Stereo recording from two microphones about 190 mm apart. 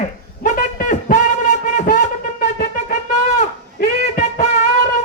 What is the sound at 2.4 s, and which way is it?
Wind instrument, 45° left (ahead or behind).